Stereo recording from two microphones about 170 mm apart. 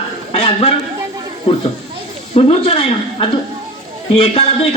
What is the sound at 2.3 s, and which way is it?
A man's voice, 35° left (ahead or behind).